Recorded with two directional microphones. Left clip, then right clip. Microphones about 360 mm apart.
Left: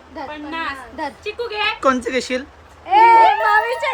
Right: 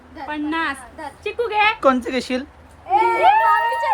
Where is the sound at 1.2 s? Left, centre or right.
Centre.